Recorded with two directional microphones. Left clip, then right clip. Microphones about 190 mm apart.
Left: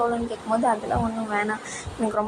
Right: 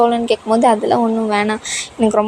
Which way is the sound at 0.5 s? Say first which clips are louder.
Right 9 dB; 55° right (ahead or behind).